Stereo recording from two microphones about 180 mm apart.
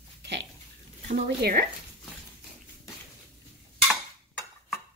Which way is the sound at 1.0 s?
55° right (ahead or behind).